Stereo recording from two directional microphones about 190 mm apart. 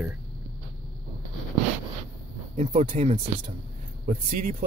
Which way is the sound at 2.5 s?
40° right (ahead or behind).